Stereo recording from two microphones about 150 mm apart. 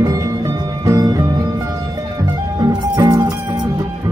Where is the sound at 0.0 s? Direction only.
25° right (ahead or behind).